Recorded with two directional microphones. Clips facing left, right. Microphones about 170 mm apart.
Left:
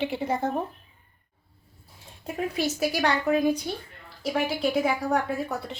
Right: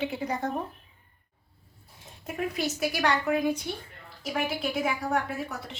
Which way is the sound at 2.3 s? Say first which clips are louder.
Left 2 dB; 30° left (ahead or behind).